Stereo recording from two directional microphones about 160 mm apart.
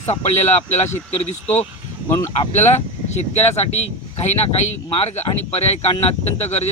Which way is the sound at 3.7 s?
45° left (ahead or behind).